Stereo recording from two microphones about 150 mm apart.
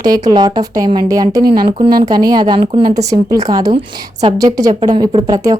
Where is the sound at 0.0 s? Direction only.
25° right (ahead or behind).